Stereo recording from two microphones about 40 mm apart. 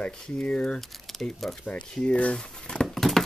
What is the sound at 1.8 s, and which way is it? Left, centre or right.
Speech, left.